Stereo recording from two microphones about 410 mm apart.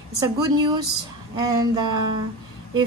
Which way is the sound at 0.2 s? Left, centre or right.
Centre.